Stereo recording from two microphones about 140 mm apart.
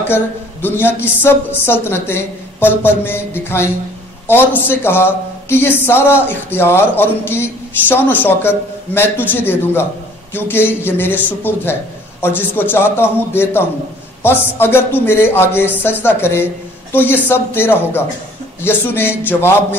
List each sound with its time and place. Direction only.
0.0 s a woman's voice: 15° left (ahead or behind)